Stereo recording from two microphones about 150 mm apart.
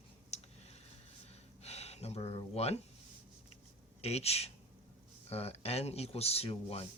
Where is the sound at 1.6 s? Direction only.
45° left (ahead or behind).